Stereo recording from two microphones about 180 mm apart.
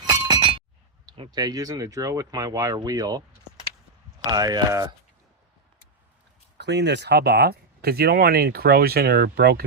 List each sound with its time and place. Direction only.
0.1 s glass: 25° right (ahead or behind)
1.0 s speech: 25° right (ahead or behind)
6.6 s speech: 70° right (ahead or behind)